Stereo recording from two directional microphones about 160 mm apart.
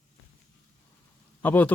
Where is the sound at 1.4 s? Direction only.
10° left (ahead or behind).